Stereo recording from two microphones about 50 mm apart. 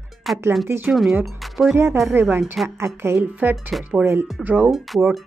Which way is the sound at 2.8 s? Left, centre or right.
Right.